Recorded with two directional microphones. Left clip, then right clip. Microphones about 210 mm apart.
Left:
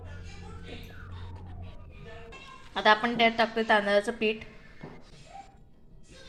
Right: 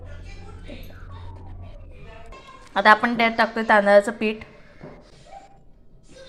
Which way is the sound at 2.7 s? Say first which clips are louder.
Right 7 dB; 15° right (ahead or behind).